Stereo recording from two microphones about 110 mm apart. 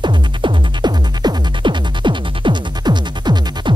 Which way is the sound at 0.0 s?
45° right (ahead or behind).